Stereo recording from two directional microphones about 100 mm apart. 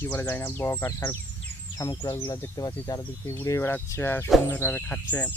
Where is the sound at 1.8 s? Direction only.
40° left (ahead or behind).